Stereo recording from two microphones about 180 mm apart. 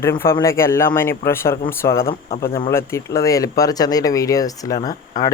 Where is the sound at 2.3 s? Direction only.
55° left (ahead or behind).